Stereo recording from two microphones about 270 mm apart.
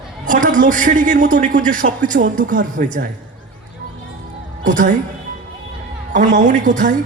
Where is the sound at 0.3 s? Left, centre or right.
Right.